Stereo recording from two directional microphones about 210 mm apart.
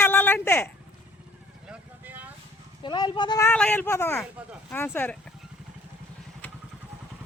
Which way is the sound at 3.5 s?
10° left (ahead or behind).